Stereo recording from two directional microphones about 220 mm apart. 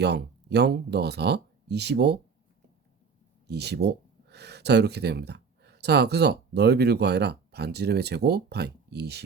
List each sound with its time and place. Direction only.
0.0 s speech: 50° right (ahead or behind)
3.4 s speech: 50° right (ahead or behind)